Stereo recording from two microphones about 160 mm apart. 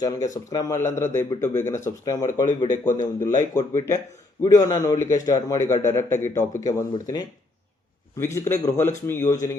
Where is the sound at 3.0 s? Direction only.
25° left (ahead or behind).